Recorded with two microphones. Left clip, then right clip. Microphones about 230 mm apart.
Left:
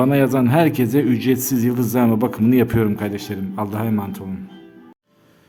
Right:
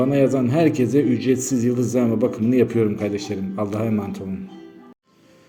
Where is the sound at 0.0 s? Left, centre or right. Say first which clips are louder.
Left 2 dB; left.